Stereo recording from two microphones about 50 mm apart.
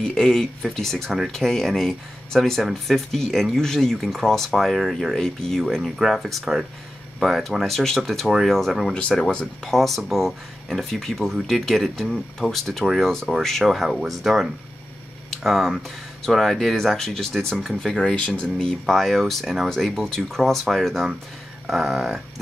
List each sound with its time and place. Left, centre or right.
0.0 s speech: centre
5.9 s speech: centre
17.6 s speech: centre
18.1 s speech: left
18.4 s speech: centre
19.7 s speech: centre